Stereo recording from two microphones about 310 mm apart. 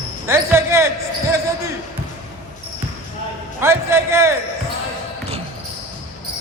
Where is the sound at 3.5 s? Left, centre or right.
Centre.